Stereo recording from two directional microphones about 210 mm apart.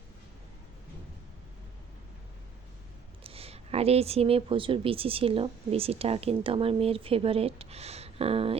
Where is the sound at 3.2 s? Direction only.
30° right (ahead or behind).